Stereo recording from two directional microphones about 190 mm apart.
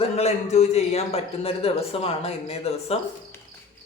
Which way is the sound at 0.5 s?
35° left (ahead or behind).